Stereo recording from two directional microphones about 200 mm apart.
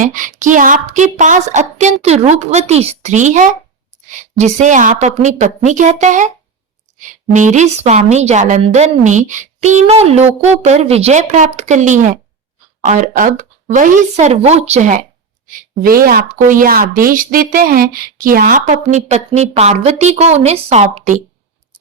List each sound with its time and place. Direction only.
0.0 s speech: 40° right (ahead or behind)